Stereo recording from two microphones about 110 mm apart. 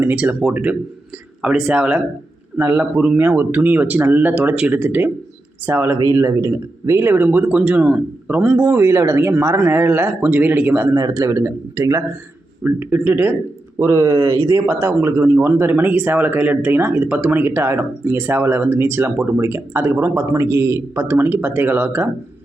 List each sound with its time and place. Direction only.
0.0 s speech: 15° right (ahead or behind)
8.5 s speech: 20° right (ahead or behind)
10.9 s speech: 30° right (ahead or behind); by 22.1 s 15° right (ahead or behind)